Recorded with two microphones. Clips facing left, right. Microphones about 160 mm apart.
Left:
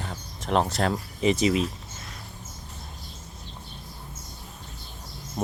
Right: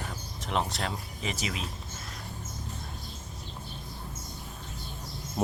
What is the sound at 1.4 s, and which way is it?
Speech, 40° left (ahead or behind).